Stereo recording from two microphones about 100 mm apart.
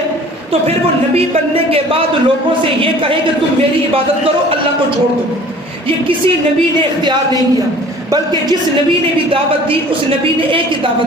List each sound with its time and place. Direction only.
1.1 s speech: 75° right (ahead or behind)
8.1 s speech: 40° right (ahead or behind)
9.3 s a woman's voice: 65° right (ahead or behind)